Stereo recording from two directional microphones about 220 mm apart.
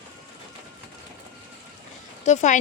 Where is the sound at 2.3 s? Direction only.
35° left (ahead or behind).